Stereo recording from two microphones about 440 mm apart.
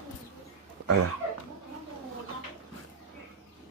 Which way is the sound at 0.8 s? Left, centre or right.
Right.